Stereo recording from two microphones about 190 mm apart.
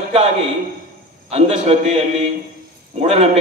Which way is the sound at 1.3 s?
35° right (ahead or behind).